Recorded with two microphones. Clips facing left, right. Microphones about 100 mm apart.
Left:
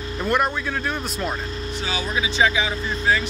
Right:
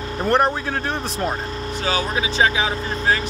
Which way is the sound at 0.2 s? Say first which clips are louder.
Right 3 dB; 40° right (ahead or behind).